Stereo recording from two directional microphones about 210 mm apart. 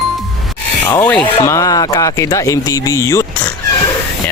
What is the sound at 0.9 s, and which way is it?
Speech, 10° left (ahead or behind).